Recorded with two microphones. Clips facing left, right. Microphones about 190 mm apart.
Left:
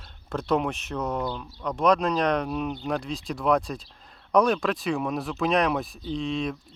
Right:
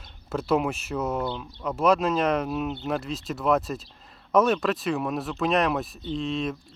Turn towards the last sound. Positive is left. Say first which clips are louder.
# even
turn(degrees=0)  # may be behind; listen again after turning